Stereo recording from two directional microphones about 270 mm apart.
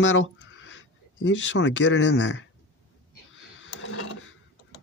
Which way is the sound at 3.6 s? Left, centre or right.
Left.